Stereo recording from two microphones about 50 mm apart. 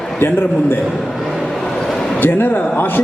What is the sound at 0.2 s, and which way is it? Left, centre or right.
Speech, left.